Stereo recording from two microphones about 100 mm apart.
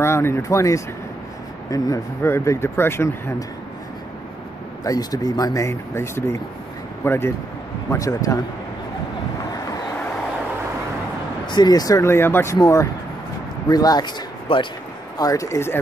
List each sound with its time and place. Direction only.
0.0 s speech: 25° left (ahead or behind)
4.8 s speech: 40° left (ahead or behind)
11.4 s speech: 45° left (ahead or behind)
12.1 s speech: 25° left (ahead or behind)
13.7 s speech: 40° left (ahead or behind)
14.5 s speech: 65° left (ahead or behind)
15.1 s speech: 35° left (ahead or behind)